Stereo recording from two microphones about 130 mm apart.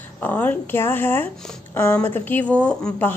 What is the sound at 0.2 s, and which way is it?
A woman's voice, 15° left (ahead or behind).